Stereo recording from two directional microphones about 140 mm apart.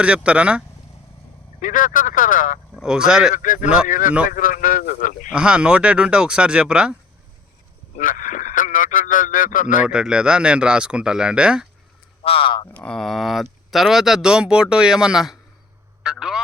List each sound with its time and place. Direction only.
0.0 s speech: 10° right (ahead or behind)
1.6 s speech: 70° left (ahead or behind)
2.7 s speech: 5° right (ahead or behind)
3.3 s speech: 70° left (ahead or behind)
5.3 s speech: 5° right (ahead or behind)
7.9 s speech: 70° left (ahead or behind)
9.8 s speech: 5° right (ahead or behind)
12.2 s speech: 40° left (ahead or behind)
12.7 s speech: 5° left (ahead or behind)
16.0 s a sound: 5° right (ahead or behind)